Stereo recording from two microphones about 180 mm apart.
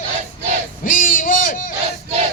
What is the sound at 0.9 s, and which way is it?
Owl, 50° left (ahead or behind).